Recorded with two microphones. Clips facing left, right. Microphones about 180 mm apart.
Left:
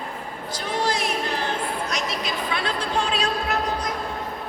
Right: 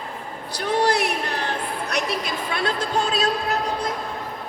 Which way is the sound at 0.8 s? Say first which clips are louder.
Right 3 dB; 65° right (ahead or behind).